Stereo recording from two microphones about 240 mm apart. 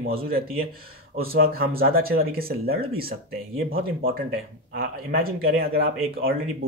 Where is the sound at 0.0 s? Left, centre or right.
Right.